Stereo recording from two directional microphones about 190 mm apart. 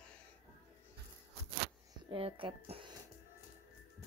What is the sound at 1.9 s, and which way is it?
Speech, 25° right (ahead or behind).